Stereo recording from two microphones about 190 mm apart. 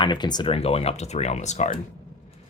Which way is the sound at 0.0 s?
25° left (ahead or behind).